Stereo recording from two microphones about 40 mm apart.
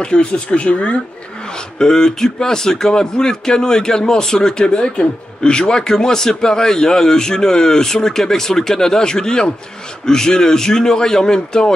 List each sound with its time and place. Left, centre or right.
0.0 s speech: left
1.8 s speech: centre